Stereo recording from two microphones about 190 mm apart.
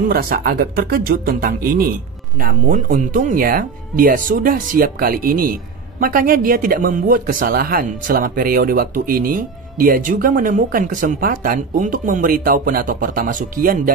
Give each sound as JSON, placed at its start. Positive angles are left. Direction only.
{"t": 0.1, "sound": "speech", "side_deg": -50}